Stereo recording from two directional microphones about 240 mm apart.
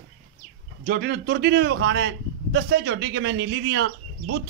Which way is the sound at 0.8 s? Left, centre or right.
Right.